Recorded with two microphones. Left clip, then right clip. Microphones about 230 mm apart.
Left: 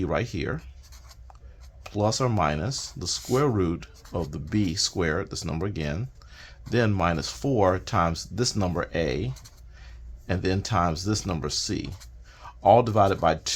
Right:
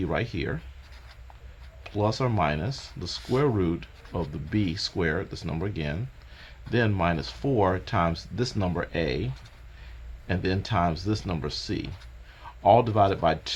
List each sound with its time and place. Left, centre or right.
0.0 s speech: left
1.8 s speech: left